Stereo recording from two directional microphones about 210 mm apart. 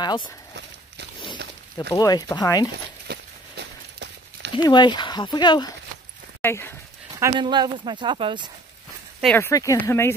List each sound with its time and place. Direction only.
1.9 s speech: 20° left (ahead or behind)
3.1 s walk: 55° right (ahead or behind)
4.6 s speech: 20° left (ahead or behind)
7.2 s speech: 20° right (ahead or behind)
9.2 s speech: 10° left (ahead or behind)